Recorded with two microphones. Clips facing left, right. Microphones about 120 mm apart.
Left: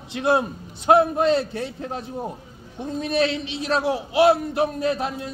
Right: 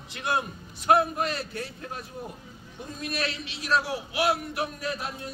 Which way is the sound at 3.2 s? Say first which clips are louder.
Left 13 dB; 25° left (ahead or behind).